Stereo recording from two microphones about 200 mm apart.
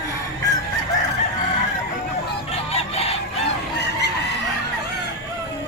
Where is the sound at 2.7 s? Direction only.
30° left (ahead or behind).